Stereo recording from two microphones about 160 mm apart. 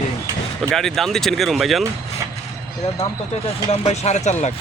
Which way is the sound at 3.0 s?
40° left (ahead or behind).